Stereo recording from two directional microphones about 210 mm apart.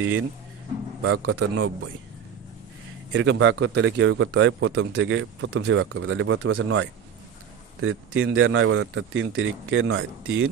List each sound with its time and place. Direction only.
1.0 s speech: 90° right
3.1 s a man's voice: 60° right (ahead or behind)
7.8 s speech: 70° right (ahead or behind)